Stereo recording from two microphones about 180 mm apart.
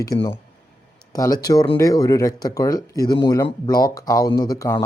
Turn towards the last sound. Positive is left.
turn(degrees=20)  # may be behind; listen again after turning